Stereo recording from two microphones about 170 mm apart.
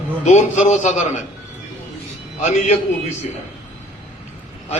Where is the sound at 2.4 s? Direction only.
40° left (ahead or behind).